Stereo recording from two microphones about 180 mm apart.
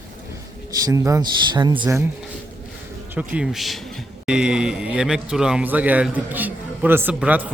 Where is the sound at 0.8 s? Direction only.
20° right (ahead or behind).